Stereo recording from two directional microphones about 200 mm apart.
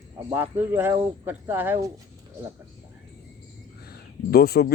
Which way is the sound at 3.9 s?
50° left (ahead or behind).